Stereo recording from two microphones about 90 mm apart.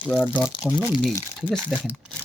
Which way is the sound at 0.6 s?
5° right (ahead or behind).